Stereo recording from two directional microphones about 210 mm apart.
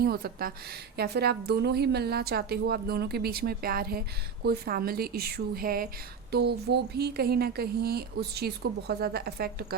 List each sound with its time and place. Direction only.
0.0 s a woman's voice: 45° right (ahead or behind)